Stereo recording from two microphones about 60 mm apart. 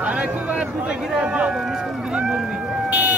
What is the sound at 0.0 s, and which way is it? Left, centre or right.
Speech, right.